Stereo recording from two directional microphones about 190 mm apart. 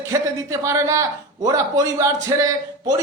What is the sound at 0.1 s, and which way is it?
A man's voice, 15° right (ahead or behind).